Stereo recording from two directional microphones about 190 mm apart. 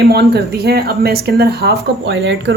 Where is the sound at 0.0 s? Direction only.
60° right (ahead or behind).